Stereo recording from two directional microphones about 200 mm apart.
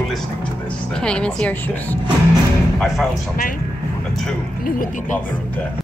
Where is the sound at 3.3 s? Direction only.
45° left (ahead or behind).